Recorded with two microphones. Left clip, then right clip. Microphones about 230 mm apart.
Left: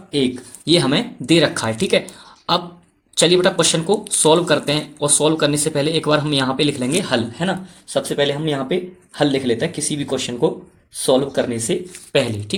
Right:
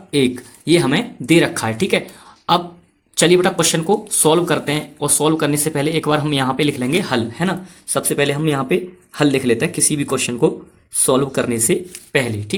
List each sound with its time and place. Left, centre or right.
0.1 s speech: right
3.2 s speech: centre; by 11.8 s right
12.1 s speech: right